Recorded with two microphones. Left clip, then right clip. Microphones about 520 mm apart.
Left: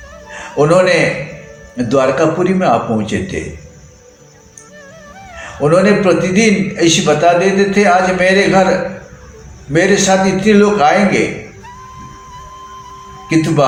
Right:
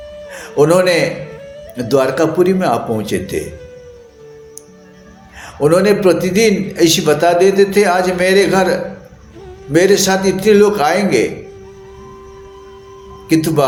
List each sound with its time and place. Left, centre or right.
0.5 s a man's voice: right
5.5 s a man's voice: right
9.7 s a man's voice: right
13.2 s speech: right